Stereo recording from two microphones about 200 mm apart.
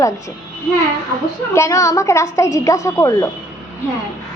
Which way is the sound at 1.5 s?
15° left (ahead or behind).